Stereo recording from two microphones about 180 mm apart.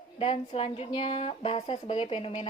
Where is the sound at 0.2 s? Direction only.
35° left (ahead or behind).